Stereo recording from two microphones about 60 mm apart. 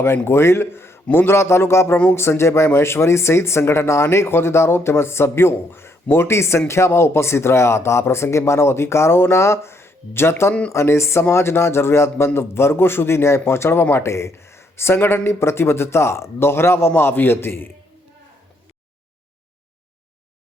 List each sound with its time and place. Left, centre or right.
0.3 s speech: left